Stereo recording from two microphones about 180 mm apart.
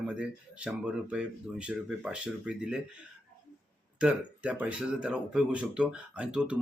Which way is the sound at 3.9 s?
5° right (ahead or behind).